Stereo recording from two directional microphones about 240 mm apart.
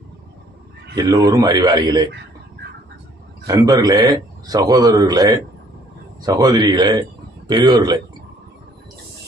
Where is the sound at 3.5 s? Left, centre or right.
Centre.